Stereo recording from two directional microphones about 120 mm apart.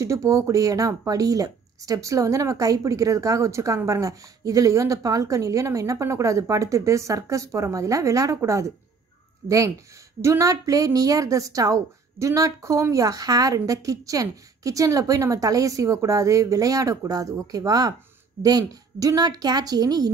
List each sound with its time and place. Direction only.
0.0 s a woman's voice: 25° right (ahead or behind)
10.2 s a woman's voice: 25° right (ahead or behind)